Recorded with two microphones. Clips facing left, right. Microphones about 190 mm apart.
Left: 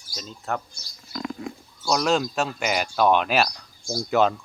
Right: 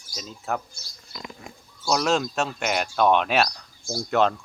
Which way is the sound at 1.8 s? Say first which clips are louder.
Left 1 dB; centre (ahead or behind).